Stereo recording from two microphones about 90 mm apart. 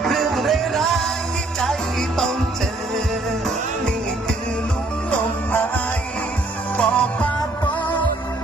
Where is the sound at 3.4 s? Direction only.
5° left (ahead or behind).